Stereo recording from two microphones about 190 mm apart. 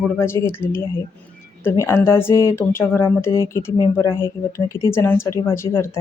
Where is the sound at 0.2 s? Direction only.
10° left (ahead or behind).